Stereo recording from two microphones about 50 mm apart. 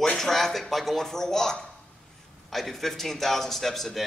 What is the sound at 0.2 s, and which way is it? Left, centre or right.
A man's voice, centre.